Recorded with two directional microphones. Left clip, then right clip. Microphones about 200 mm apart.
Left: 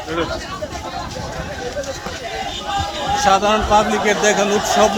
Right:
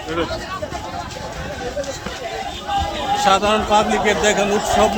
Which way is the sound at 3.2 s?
15° left (ahead or behind).